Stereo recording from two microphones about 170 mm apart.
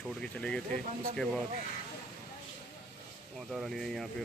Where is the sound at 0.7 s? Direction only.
55° right (ahead or behind).